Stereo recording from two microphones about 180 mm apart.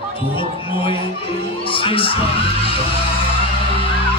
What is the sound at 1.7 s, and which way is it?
Speech, 30° left (ahead or behind).